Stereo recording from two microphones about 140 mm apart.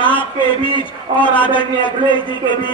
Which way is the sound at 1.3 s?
35° left (ahead or behind).